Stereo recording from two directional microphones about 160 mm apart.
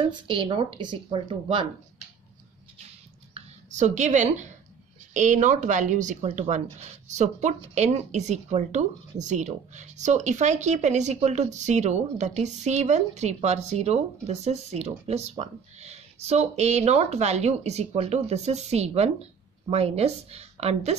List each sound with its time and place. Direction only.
0.0 s speech: 35° right (ahead or behind)
3.3 s speech: 45° right (ahead or behind)